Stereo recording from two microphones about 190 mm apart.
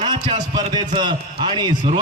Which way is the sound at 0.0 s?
25° right (ahead or behind).